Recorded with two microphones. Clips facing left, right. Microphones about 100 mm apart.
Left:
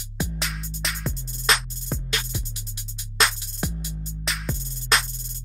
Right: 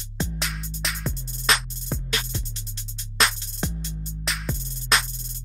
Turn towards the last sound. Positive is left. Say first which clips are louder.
# even
turn(degrees=0)  # may be behind; listen again after turning